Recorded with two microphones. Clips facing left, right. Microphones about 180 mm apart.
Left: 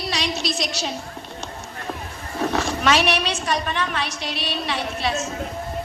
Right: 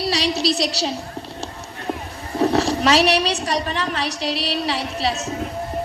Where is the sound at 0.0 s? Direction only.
35° right (ahead or behind).